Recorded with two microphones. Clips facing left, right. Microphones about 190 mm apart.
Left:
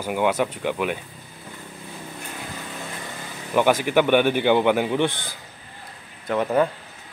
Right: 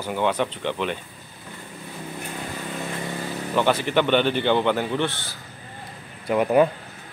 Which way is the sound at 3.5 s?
10° left (ahead or behind).